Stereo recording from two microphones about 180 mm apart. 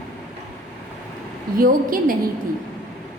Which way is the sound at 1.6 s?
50° right (ahead or behind).